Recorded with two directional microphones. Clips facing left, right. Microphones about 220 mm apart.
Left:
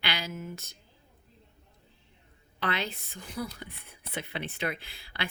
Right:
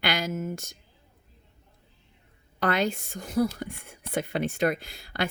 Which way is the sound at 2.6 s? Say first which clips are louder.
Right 7 dB; 45° right (ahead or behind).